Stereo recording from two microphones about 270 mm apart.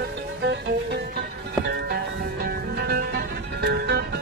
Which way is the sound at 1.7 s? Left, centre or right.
Right.